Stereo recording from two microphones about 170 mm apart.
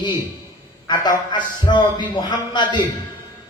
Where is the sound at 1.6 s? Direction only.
25° left (ahead or behind).